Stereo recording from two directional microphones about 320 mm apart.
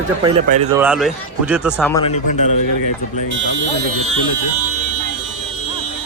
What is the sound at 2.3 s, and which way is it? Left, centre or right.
Speech, left.